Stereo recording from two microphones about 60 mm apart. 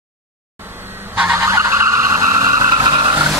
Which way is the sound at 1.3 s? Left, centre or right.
Right.